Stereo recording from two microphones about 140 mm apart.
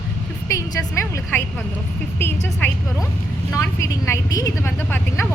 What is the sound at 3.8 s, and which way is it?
Speech, 20° left (ahead or behind).